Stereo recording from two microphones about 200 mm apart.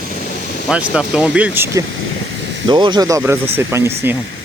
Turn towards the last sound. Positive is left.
turn(degrees=-10)  # may be behind; listen again after turning